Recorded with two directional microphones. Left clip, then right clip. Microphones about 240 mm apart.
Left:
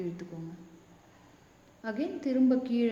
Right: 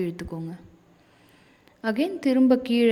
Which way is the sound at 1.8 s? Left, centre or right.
Right.